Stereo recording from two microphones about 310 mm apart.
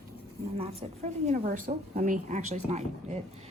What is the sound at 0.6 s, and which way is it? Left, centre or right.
A woman's voice, centre.